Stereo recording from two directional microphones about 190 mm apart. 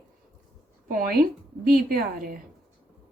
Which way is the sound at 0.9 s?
50° right (ahead or behind).